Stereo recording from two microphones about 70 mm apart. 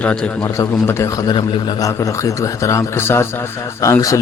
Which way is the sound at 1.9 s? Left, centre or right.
Left.